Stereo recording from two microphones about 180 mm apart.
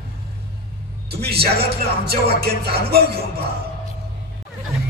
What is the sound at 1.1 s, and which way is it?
Speech, 60° right (ahead or behind).